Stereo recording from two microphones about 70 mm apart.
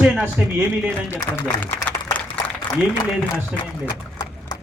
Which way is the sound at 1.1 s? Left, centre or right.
Left.